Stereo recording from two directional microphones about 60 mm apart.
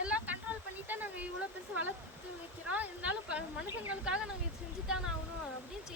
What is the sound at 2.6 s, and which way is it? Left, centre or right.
Speech, right.